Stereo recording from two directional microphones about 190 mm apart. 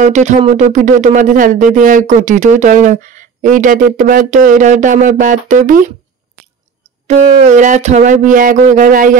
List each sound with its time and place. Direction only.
0.0 s speech: 40° right (ahead or behind)
7.1 s speech: 40° right (ahead or behind)